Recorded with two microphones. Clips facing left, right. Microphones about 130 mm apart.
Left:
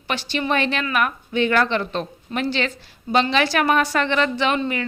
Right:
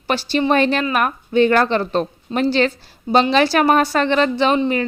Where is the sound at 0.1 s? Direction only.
35° right (ahead or behind).